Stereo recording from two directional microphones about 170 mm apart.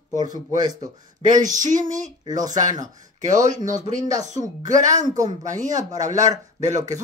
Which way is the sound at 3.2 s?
45° right (ahead or behind).